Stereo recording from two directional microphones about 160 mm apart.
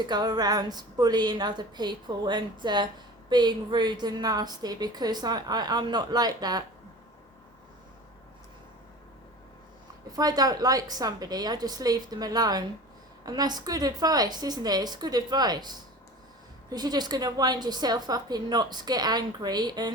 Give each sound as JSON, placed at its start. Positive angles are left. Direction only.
{"t": 0.0, "sound": "a woman's voice", "side_deg": -25}
{"t": 10.1, "sound": "a woman's voice", "side_deg": -25}